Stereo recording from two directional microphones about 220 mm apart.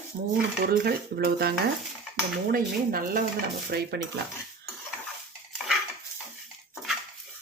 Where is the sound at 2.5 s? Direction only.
40° right (ahead or behind).